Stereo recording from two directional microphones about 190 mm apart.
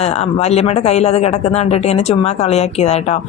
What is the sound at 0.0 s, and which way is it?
Speech, 35° left (ahead or behind).